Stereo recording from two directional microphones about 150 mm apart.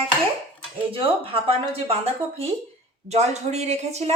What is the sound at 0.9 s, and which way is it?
Speech, 40° right (ahead or behind).